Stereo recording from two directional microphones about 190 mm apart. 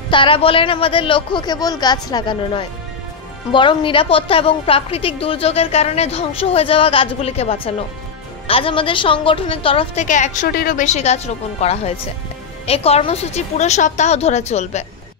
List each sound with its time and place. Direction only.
0.1 s a woman's voice: 25° left (ahead or behind)
10.0 s a woman's voice: 40° left (ahead or behind)